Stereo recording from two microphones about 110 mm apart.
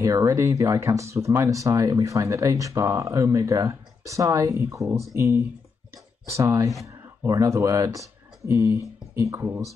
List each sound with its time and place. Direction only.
0.0 s speech: 30° right (ahead or behind)